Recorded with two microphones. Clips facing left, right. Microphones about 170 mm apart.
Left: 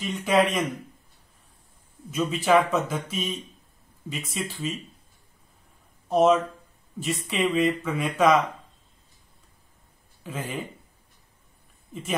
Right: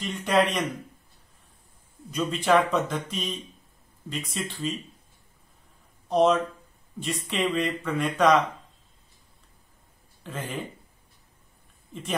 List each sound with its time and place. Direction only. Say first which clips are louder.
0.0 s speech: left 1 dB; centre (ahead or behind)
2.0 s speech: left 1 dB; 5° left (ahead or behind)
6.0 s speech: left 1 dB; 5° left (ahead or behind)
10.2 s speech: left 1 dB; 5° left (ahead or behind)